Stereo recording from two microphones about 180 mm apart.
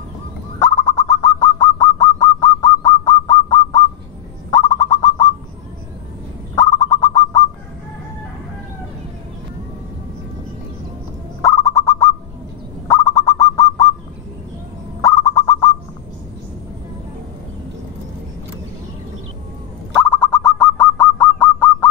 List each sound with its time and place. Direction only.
0.6 s bird: 20° left (ahead or behind)
6.5 s bird: 20° left (ahead or behind)
11.4 s bird: 15° left (ahead or behind)
15.0 s fowl: 15° left (ahead or behind)
20.1 s bird: 5° left (ahead or behind)